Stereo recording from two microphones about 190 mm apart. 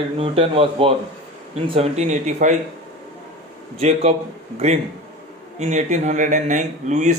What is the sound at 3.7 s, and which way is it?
Speech, 35° right (ahead or behind).